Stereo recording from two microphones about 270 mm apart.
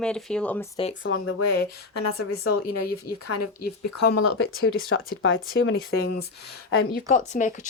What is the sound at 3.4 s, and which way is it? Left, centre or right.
Speech, left.